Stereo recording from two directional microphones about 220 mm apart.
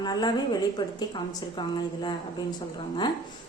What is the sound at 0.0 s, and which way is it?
Speech, 20° left (ahead or behind).